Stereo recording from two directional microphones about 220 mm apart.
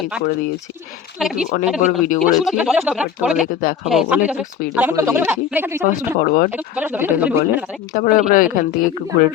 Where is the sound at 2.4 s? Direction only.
Centre (ahead or behind).